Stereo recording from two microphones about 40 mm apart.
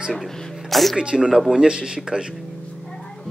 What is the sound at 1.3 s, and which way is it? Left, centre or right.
Speech, centre.